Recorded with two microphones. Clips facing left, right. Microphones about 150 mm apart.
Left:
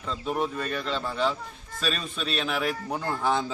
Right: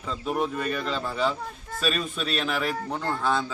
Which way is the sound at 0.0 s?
5° right (ahead or behind).